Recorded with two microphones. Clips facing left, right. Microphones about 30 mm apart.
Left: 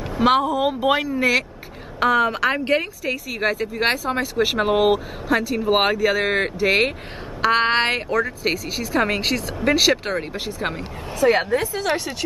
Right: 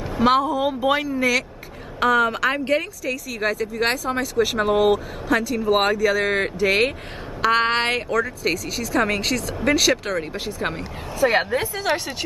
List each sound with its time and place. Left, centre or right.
0.4 s a woman's voice: centre
2.6 s a woman's voice: left
10.4 s speech: centre
11.2 s a woman's voice: centre